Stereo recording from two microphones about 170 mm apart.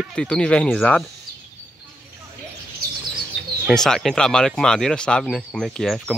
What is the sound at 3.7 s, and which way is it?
Speech, 5° left (ahead or behind).